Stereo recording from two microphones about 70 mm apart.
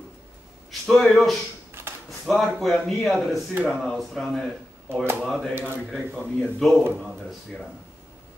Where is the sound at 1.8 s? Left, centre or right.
Right.